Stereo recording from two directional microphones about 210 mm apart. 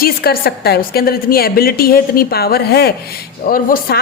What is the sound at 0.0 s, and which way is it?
A woman's voice, 45° left (ahead or behind).